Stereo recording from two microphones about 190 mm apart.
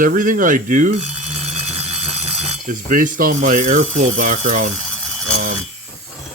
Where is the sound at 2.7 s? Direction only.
45° right (ahead or behind).